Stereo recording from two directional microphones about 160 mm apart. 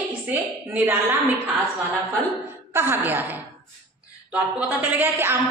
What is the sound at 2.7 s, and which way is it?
Speech, 15° right (ahead or behind).